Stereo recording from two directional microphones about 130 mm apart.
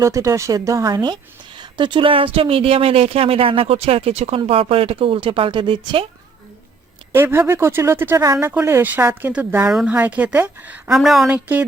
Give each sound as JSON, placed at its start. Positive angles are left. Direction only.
{"t": 0.0, "sound": "a woman's voice", "side_deg": -25}
{"t": 7.1, "sound": "a woman's voice", "side_deg": -20}